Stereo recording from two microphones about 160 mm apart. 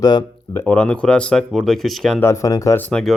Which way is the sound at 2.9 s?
5° left (ahead or behind).